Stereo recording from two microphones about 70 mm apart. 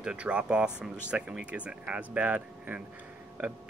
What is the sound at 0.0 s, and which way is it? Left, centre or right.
Speech, centre.